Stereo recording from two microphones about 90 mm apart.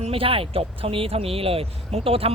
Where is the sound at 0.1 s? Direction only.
90° right.